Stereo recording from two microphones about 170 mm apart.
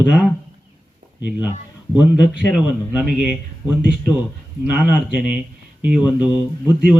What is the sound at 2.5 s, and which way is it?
Speech, 10° right (ahead or behind).